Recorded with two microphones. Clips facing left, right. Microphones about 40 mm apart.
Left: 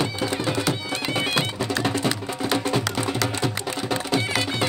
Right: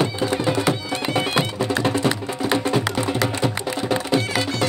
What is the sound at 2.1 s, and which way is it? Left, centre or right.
Music, right.